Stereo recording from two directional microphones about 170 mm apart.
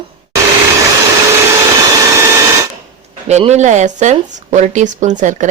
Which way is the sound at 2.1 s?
15° right (ahead or behind).